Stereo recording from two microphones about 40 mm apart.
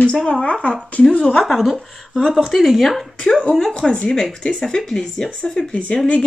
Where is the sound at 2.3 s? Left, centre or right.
Centre.